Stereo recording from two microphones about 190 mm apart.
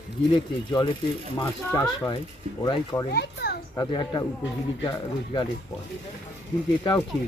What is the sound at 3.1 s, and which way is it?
Speech, 55° left (ahead or behind).